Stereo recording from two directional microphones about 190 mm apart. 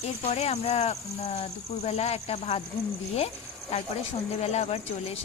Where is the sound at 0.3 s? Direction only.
35° left (ahead or behind).